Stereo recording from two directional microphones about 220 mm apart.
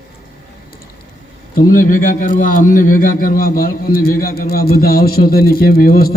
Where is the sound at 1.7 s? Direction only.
40° left (ahead or behind).